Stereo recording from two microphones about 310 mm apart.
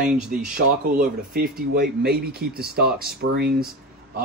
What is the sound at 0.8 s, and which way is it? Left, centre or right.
Speech, right.